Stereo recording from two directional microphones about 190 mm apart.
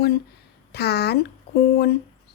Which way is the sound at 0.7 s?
60° left (ahead or behind).